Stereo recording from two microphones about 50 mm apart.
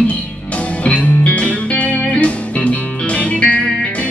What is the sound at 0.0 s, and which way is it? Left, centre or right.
Music, left.